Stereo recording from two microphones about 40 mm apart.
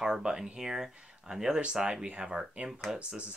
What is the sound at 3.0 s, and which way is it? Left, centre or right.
Speech, right.